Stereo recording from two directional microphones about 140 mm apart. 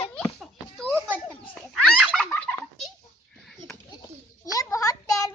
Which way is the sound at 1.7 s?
5° left (ahead or behind).